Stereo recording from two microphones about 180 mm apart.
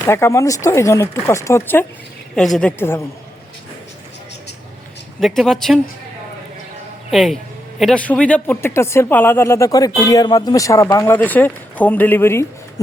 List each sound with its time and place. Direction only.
0.0 s a woman's voice: 15° left (ahead or behind)
5.2 s a woman's voice: centre (ahead or behind)
7.1 s a woman's voice: centre (ahead or behind)